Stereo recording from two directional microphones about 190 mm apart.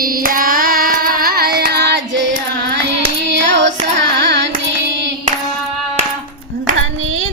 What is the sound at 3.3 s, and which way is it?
Child singing, 70° right (ahead or behind).